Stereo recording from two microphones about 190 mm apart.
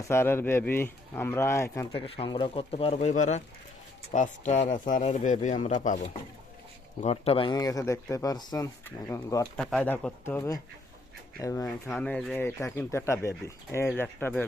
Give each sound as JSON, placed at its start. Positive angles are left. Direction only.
{"t": 0.1, "sound": "speech", "side_deg": 10}
{"t": 1.9, "sound": "speech", "side_deg": 30}
{"t": 7.0, "sound": "speech", "side_deg": 30}
{"t": 9.6, "sound": "speech", "side_deg": 5}
{"t": 11.9, "sound": "speech", "side_deg": 5}